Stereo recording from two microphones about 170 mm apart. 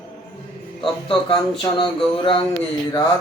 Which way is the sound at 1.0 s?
30° left (ahead or behind).